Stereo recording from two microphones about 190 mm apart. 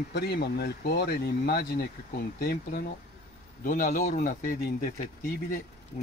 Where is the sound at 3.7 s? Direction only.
45° left (ahead or behind).